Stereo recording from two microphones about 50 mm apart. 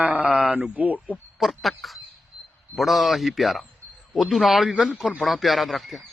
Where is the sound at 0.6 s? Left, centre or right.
Right.